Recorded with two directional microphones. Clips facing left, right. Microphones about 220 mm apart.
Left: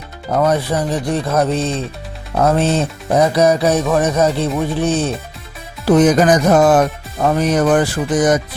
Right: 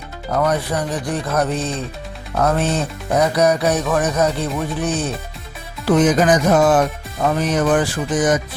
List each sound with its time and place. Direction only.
0.3 s music: 25° left (ahead or behind)
5.8 s speech: 40° left (ahead or behind)